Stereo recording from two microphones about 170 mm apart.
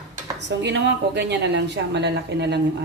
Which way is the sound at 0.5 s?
90° right.